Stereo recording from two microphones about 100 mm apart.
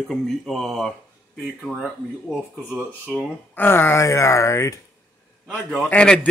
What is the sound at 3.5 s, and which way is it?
Speech, 20° left (ahead or behind).